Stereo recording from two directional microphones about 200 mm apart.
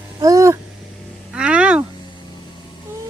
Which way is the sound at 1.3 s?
5° right (ahead or behind).